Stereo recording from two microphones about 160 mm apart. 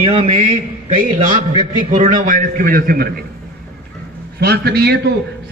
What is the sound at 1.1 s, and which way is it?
Speech, 30° right (ahead or behind).